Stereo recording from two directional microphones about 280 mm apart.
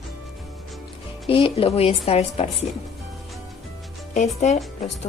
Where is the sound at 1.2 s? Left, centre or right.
Centre.